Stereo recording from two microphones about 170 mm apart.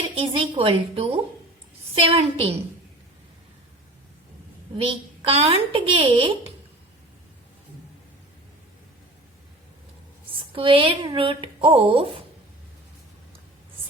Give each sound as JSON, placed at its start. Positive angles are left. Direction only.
{"t": 0.2, "sound": "a woman's voice", "side_deg": -35}
{"t": 4.8, "sound": "a woman's voice", "side_deg": -35}
{"t": 10.5, "sound": "a woman's voice", "side_deg": -30}